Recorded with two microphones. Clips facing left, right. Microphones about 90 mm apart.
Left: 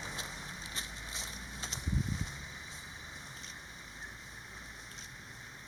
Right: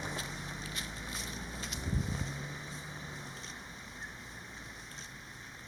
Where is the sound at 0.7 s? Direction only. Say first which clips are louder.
Right 2 dB; 30° left (ahead or behind).